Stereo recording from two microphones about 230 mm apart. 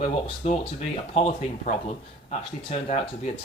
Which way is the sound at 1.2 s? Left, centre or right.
Left.